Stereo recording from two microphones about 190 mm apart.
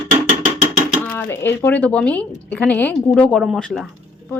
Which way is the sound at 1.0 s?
10° left (ahead or behind).